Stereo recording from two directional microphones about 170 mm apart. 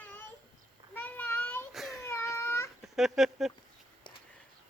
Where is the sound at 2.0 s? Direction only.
15° left (ahead or behind).